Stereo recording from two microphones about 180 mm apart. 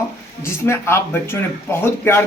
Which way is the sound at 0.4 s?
15° left (ahead or behind).